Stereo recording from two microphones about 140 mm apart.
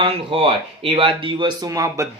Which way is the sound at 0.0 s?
40° right (ahead or behind).